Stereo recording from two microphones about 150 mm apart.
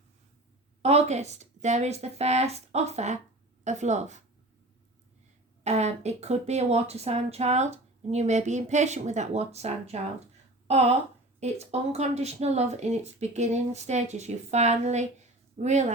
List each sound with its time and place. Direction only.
0.8 s speech: 45° right (ahead or behind)
5.6 s speech: 50° right (ahead or behind)